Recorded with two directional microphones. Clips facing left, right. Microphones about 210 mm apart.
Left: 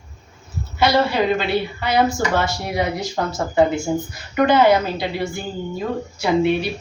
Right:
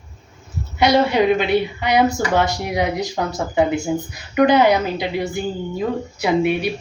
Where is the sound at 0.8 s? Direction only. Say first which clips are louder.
Right 2 dB; 20° right (ahead or behind).